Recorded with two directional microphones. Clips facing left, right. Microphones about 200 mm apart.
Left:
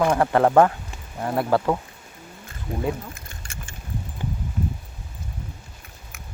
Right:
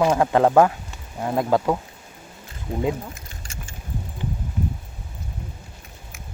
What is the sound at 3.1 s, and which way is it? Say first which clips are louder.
Keys jangling: right 1 dB; 55° left (ahead or behind).